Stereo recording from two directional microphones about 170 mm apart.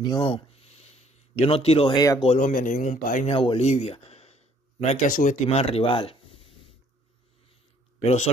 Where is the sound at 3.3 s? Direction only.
35° left (ahead or behind).